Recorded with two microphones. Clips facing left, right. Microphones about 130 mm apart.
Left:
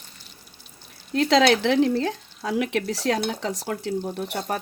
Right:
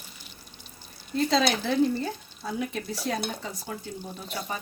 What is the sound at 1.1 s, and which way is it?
Speech, 90° left.